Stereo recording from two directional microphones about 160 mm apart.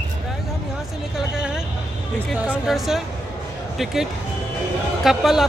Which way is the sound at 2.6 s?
Centre (ahead or behind).